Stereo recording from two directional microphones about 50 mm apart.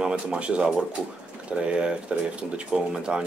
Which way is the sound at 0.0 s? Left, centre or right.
Right.